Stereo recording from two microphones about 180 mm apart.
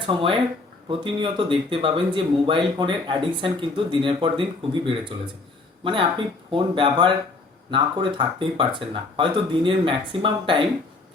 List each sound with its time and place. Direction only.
0.0 s speech: 30° right (ahead or behind)
5.8 s speech: 30° right (ahead or behind)